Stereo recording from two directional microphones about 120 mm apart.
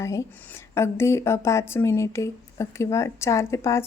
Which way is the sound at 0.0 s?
25° left (ahead or behind).